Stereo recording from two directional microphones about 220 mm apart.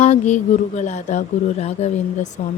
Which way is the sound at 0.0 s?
30° left (ahead or behind).